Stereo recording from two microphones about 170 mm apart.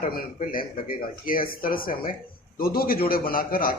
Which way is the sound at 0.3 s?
55° left (ahead or behind).